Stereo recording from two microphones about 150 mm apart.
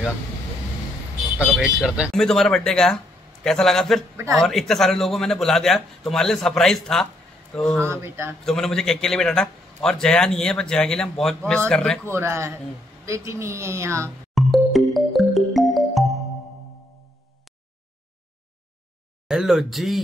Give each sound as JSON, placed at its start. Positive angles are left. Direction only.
{"t": 1.6, "sound": "a man's voice", "side_deg": -5}
{"t": 7.8, "sound": "speech", "side_deg": -15}
{"t": 8.5, "sound": "a man's voice", "side_deg": 5}
{"t": 12.1, "sound": "a woman's voice", "side_deg": -15}
{"t": 14.3, "sound": "music", "side_deg": 0}
{"t": 19.2, "sound": "a man's voice", "side_deg": -5}